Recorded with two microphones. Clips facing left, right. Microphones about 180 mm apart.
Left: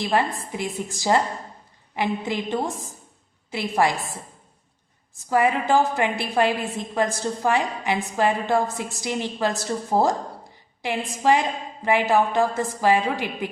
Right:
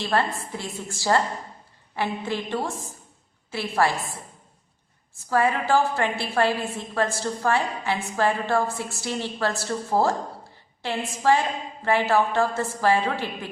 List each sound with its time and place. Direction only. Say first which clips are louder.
0.0 s a woman's voice: left 2 dB; 15° left (ahead or behind)
5.1 s a woman's voice: left 2 dB; 15° left (ahead or behind)